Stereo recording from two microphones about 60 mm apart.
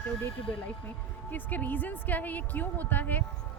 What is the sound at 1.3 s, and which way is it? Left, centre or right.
A woman's voice, left.